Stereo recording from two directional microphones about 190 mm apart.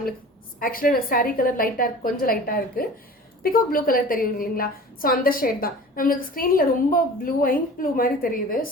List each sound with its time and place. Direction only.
0.6 s a woman's voice: 50° left (ahead or behind)